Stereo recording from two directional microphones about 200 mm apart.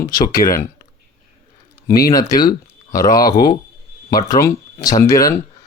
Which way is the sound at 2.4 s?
15° left (ahead or behind).